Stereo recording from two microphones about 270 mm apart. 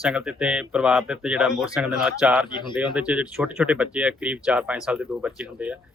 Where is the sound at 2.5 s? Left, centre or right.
Centre.